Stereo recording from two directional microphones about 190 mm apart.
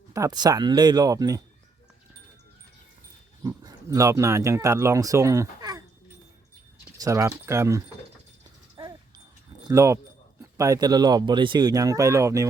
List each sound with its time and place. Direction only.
0.1 s speech: 20° right (ahead or behind)
3.4 s speech: 20° right (ahead or behind)
7.0 s speech: 15° right (ahead or behind)
8.7 s dog: 20° right (ahead or behind)
9.6 s speech: 15° right (ahead or behind)